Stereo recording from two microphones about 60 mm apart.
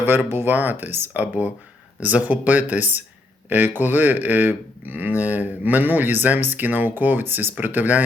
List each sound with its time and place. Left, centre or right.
0.0 s speech: right